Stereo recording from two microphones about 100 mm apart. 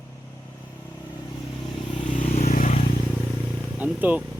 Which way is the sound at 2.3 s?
90° left.